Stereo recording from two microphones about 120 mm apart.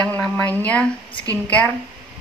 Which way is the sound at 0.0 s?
10° left (ahead or behind).